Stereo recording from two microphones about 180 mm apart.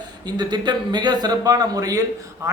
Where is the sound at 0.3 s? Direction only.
25° right (ahead or behind).